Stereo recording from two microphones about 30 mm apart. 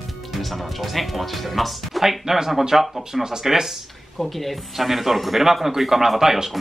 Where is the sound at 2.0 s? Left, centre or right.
Centre.